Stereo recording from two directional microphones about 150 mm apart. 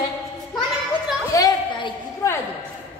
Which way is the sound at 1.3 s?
25° left (ahead or behind).